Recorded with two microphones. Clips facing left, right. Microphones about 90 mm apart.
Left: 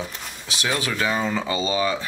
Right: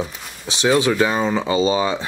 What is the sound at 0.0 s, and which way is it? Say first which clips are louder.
Speech: right 5 dB; 10° right (ahead or behind).